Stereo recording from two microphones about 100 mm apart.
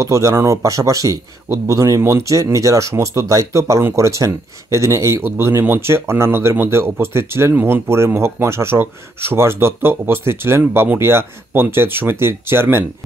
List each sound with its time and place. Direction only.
0.0 s speech: 30° right (ahead or behind)